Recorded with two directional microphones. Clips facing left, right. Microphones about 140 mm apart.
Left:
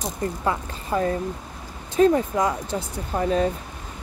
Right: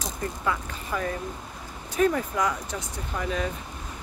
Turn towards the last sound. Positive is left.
turn(degrees=35)  # may be behind; listen again after turning